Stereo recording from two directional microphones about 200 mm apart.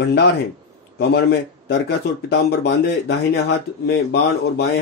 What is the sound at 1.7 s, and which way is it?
A man's voice, 55° left (ahead or behind).